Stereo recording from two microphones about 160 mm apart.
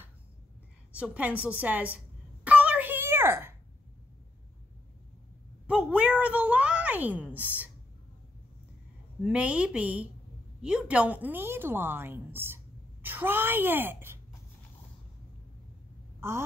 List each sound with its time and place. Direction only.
0.9 s a woman's voice: 10° right (ahead or behind)
2.4 s a sound: 10° right (ahead or behind)
5.7 s a sound: 5° right (ahead or behind)
7.3 s a woman's voice: 10° right (ahead or behind)
9.2 s a woman's voice: 5° right (ahead or behind)
16.2 s speech: 15° right (ahead or behind)